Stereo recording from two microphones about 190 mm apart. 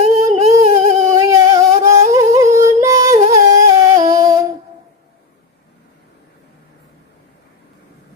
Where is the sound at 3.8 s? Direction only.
20° right (ahead or behind).